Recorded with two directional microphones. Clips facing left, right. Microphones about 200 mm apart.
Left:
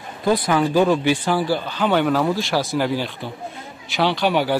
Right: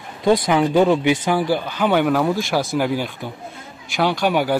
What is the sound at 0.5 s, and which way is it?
Speech, 15° right (ahead or behind).